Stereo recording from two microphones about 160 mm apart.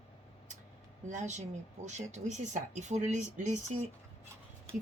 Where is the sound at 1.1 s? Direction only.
50° right (ahead or behind).